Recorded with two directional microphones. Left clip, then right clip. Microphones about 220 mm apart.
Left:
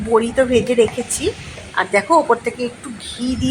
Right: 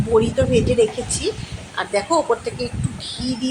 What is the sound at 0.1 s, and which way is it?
Speech, 15° left (ahead or behind).